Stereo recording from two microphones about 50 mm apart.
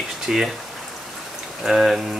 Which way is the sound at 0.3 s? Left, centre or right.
Centre.